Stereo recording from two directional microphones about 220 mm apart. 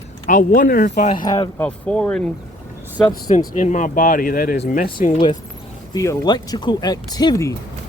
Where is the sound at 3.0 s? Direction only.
20° left (ahead or behind).